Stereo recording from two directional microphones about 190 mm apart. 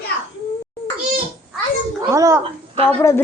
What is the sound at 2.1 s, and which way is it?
Speech, 15° right (ahead or behind).